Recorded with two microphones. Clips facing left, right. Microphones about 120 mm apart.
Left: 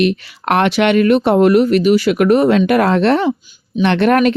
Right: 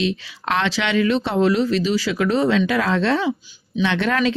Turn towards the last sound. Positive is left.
turn(degrees=60)  # may be behind; listen again after turning